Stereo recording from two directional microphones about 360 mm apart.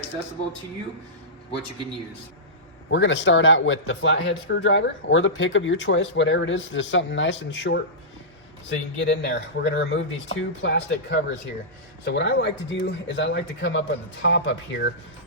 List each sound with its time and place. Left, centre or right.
2.9 s speech: left
9.0 s speech: left